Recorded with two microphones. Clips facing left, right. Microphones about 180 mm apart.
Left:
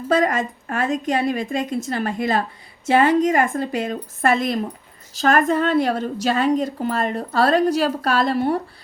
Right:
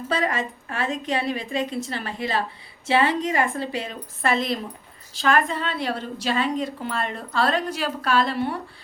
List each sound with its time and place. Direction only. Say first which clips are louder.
0.1 s a woman's voice: left 6 dB; 45° left (ahead or behind)